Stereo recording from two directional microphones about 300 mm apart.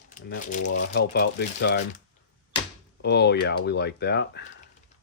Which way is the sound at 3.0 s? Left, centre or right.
Left.